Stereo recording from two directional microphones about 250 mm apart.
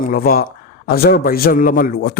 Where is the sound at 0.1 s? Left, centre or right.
Left.